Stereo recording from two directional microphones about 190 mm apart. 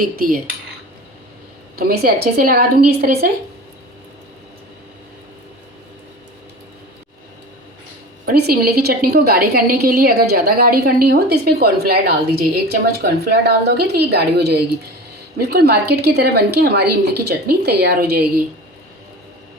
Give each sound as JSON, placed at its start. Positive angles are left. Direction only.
{"t": 0.2, "sound": "a woman's voice", "side_deg": -50}
{"t": 1.7, "sound": "a woman's voice", "side_deg": -55}
{"t": 8.3, "sound": "a woman's voice", "side_deg": -55}